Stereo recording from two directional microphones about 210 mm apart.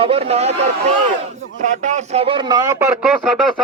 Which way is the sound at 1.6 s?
35° right (ahead or behind).